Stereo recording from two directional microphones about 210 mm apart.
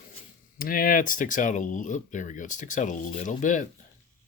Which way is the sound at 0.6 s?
40° left (ahead or behind).